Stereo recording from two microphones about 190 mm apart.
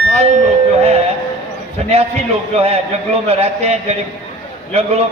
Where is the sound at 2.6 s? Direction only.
35° right (ahead or behind).